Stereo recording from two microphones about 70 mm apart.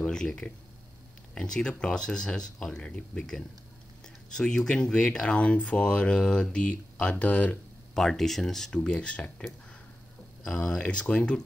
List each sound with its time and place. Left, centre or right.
0.0 s speech: centre
7.9 s speech: centre
10.4 s speech: centre